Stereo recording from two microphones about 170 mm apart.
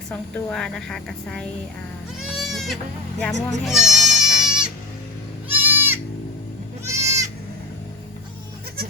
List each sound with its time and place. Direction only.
0.1 s a woman's voice: 5° left (ahead or behind)
2.3 s goat: centre (ahead or behind); by 7.3 s 15° right (ahead or behind)